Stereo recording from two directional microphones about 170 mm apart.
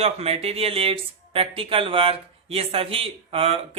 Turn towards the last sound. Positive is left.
turn(degrees=-35)  # may be behind; listen again after turning